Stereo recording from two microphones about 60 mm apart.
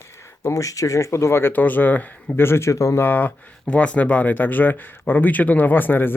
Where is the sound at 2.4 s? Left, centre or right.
Left.